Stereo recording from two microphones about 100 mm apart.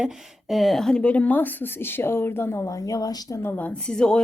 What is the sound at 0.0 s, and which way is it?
A woman's voice, centre (ahead or behind).